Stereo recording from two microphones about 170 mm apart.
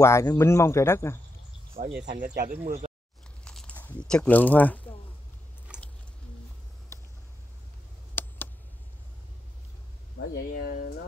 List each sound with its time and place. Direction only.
0.0 s speech: 15° left (ahead or behind)
1.8 s speech: 60° right (ahead or behind)
3.4 s speech: 5° left (ahead or behind)
8.1 s a sound: 10° left (ahead or behind)
10.3 s speech: 65° left (ahead or behind)